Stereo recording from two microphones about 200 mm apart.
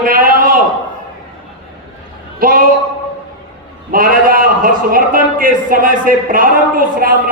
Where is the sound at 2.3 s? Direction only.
45° right (ahead or behind).